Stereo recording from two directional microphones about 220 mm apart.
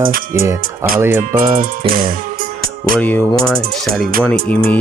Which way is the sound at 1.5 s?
40° right (ahead or behind).